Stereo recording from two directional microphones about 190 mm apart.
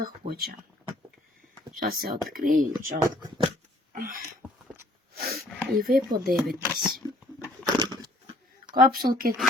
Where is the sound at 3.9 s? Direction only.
50° right (ahead or behind).